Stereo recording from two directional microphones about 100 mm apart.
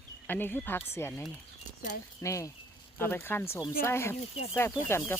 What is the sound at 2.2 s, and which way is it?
Speech, 30° left (ahead or behind).